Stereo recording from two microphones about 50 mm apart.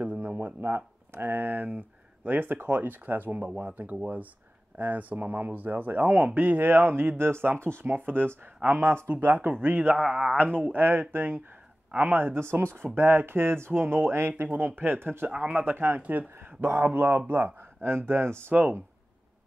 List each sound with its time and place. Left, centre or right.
0.0 s a sound: right
0.6 s speech: right
7.8 s speech: right
8.6 s speech: right
12.2 s speech: right
15.2 s speech: right
15.6 s speech: right
16.3 s speech: right
18.5 s speech: right